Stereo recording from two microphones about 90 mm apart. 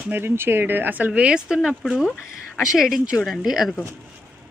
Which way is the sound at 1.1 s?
10° right (ahead or behind).